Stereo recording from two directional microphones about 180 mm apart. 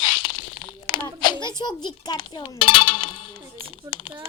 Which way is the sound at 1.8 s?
25° left (ahead or behind).